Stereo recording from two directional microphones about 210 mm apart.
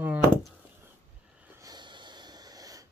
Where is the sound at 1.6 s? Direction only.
20° right (ahead or behind).